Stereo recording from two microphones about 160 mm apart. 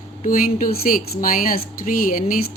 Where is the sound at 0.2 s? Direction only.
60° left (ahead or behind).